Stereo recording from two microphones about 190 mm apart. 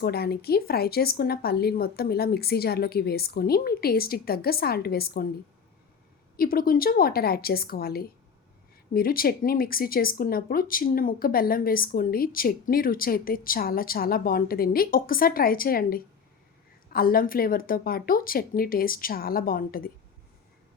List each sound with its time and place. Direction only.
0.0 s speech: 55° left (ahead or behind)
6.3 s speech: 50° left (ahead or behind)